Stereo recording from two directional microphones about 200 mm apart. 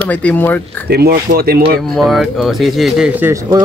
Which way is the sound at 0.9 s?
50° right (ahead or behind).